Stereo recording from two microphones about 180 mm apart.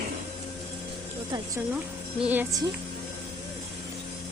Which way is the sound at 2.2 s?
10° right (ahead or behind).